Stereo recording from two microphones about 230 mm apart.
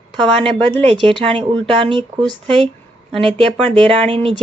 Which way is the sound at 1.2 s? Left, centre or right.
Right.